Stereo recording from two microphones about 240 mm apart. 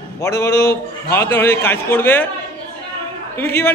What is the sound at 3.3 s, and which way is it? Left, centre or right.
Speech, centre.